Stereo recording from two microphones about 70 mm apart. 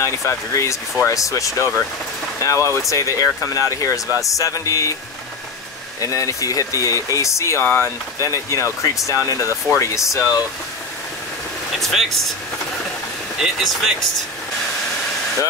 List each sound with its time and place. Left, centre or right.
0.0 s speech: left
5.9 s speech: left
7.6 s speech: left
8.2 s speech: left
11.8 s speech: centre
13.4 s speech: centre